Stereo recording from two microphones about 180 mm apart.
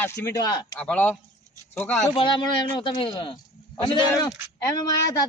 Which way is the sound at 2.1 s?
30° left (ahead or behind).